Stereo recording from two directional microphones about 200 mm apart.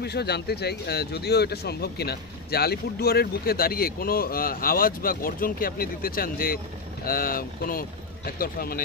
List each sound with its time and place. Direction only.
0.0 s speech: 55° left (ahead or behind)